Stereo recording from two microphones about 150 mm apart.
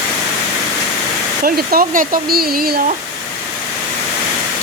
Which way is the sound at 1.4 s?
75° right (ahead or behind).